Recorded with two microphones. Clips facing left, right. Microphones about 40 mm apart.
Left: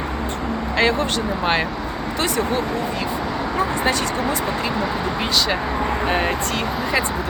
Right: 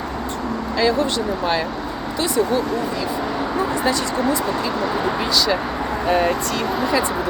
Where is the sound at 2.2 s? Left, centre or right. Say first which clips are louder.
Right 3 dB; left.